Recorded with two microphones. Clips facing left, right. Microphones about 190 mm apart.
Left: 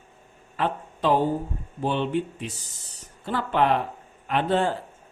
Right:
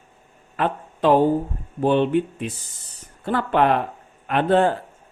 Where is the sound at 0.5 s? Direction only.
60° right (ahead or behind).